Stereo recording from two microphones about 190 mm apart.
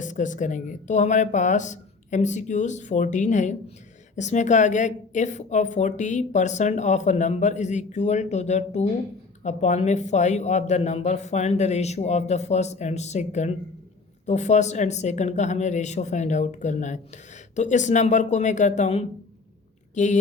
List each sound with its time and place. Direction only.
0.0 s speech: 40° left (ahead or behind)